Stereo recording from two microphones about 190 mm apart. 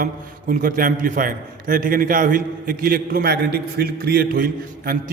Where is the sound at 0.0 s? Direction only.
50° right (ahead or behind).